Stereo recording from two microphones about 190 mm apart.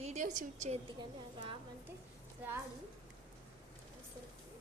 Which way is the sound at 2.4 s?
10° right (ahead or behind).